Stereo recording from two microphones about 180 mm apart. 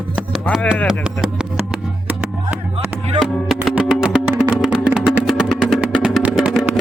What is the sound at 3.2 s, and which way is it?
Music, centre (ahead or behind).